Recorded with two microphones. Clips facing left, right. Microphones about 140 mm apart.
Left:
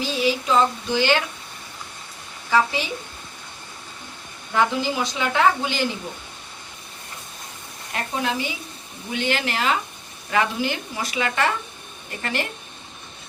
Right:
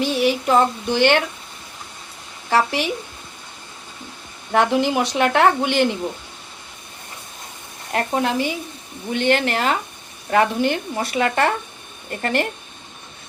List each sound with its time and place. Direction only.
0.0 s child singing: 65° right (ahead or behind)
2.5 s speech: 70° right (ahead or behind)
4.5 s speech: 70° right (ahead or behind)
7.9 s child singing: 55° right (ahead or behind)
9.1 s speech: 55° right (ahead or behind)
12.2 s child singing: 55° right (ahead or behind)